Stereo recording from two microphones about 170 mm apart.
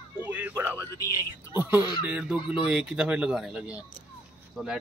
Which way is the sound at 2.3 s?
30° left (ahead or behind).